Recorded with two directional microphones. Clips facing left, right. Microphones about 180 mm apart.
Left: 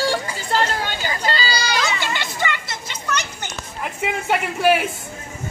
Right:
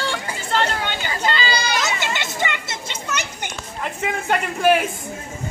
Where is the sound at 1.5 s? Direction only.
50° right (ahead or behind).